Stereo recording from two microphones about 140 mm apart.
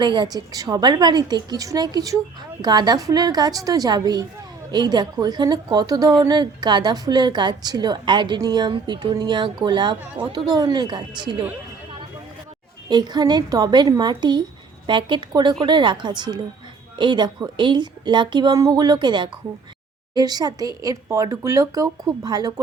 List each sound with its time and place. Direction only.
0.0 s a woman's voice: 30° right (ahead or behind)
12.9 s a woman's voice: 30° right (ahead or behind)